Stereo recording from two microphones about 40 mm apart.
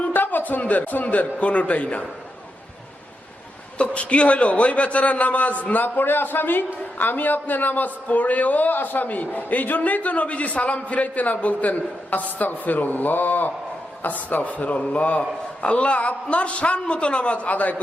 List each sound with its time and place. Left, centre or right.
0.1 s a man's voice: left
3.8 s a man's voice: left
6.0 s a man's voice: left